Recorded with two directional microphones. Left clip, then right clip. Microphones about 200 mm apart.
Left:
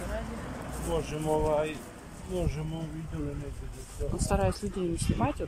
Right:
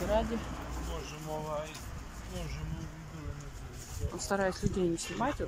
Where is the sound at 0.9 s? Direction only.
60° left (ahead or behind).